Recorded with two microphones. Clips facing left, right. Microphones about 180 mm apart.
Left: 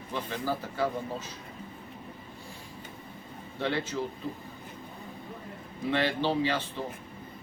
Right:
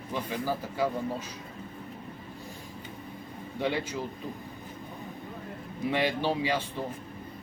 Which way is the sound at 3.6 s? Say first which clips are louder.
Right 1 dB; 15° right (ahead or behind).